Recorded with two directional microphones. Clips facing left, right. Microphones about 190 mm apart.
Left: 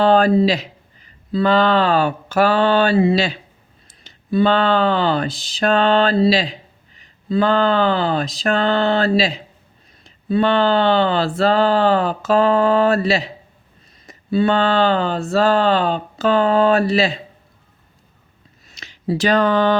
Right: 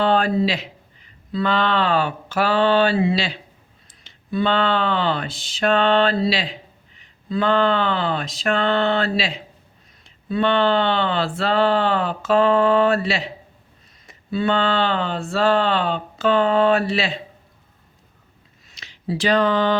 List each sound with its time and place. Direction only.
0.0 s speech: 40° left (ahead or behind)
18.7 s speech: 45° left (ahead or behind)